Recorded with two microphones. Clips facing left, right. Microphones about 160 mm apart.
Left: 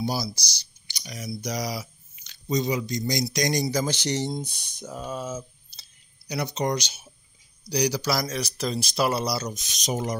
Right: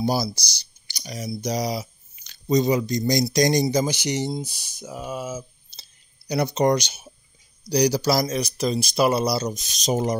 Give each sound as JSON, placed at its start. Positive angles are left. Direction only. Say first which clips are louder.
{"t": 0.0, "sound": "speech", "louder": "right 5 dB", "side_deg": -50}
{"t": 2.1, "sound": "speech", "louder": "right 6 dB", "side_deg": -40}
{"t": 3.9, "sound": "speech", "louder": "right 2 dB", "side_deg": -10}
{"t": 5.7, "sound": "clicking", "louder": "right 3 dB", "side_deg": -35}
{"t": 7.7, "sound": "speech", "louder": "right 5 dB", "side_deg": -35}
{"t": 8.3, "sound": "speech", "louder": "right 5 dB", "side_deg": -20}